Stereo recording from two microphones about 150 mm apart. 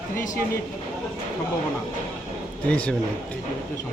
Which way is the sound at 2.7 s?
5° left (ahead or behind).